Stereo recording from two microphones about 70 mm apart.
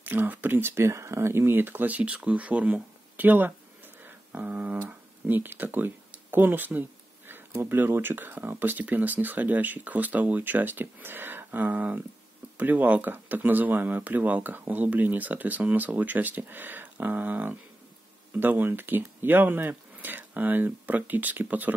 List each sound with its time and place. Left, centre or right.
0.0 s speech: right